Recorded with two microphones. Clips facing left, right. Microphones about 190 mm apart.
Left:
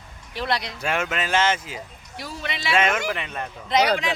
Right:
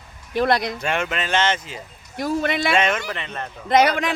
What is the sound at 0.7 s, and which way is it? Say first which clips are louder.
Speech: right 1 dB; 5° left (ahead or behind).